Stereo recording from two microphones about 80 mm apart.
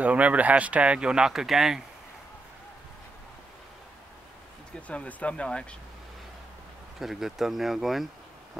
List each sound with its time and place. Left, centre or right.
0.0 s speech: centre
4.8 s speech: centre
7.0 s speech: centre